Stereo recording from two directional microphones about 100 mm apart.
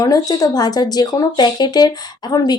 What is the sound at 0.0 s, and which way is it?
Speech, 40° left (ahead or behind).